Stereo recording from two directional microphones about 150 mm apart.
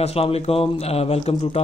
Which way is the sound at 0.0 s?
40° left (ahead or behind).